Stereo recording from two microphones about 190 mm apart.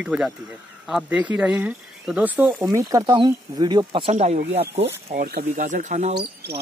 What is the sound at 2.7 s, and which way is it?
Speech, 15° right (ahead or behind).